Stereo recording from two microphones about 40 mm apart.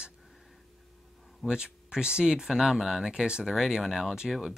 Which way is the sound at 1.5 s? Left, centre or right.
Right.